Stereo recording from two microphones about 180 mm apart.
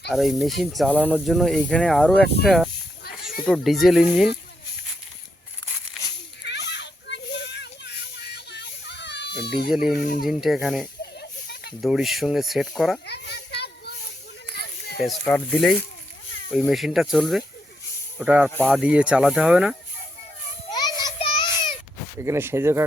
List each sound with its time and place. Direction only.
0.1 s speech: centre (ahead or behind)
6.4 s a sound: 70° left (ahead or behind)
8.4 s children playing: 70° left (ahead or behind)
9.6 s speech: 5° right (ahead or behind)
10.0 s speech: 50° left (ahead or behind)
10.2 s speech: centre (ahead or behind)
13.1 s a sound: 65° left (ahead or behind)
15.0 s speech: 5° left (ahead or behind)
18.5 s speech: 5° left (ahead or behind)
18.8 s speech: 5° right (ahead or behind)
20.7 s child singing: 20° left (ahead or behind)
22.2 s speech: 15° right (ahead or behind)